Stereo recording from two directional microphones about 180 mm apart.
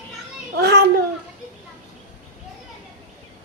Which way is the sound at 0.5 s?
60° right (ahead or behind).